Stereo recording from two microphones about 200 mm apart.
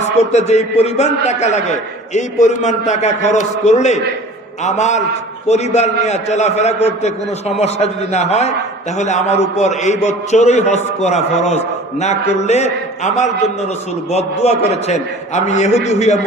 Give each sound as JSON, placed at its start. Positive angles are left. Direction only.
{"t": 0.0, "sound": "a man's voice", "side_deg": 35}